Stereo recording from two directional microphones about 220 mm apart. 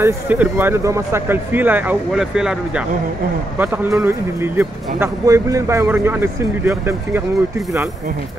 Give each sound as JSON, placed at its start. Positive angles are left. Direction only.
{"t": 0.0, "sound": "speech", "side_deg": -10}